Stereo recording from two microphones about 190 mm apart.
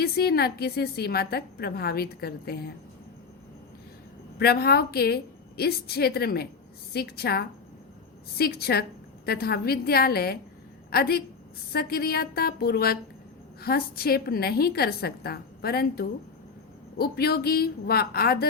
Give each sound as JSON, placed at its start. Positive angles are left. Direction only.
{"t": 0.0, "sound": "a woman's voice", "side_deg": 55}
{"t": 4.4, "sound": "a woman's voice", "side_deg": 55}